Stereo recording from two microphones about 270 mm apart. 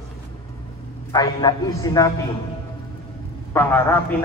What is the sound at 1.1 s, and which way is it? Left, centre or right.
A man's voice, centre.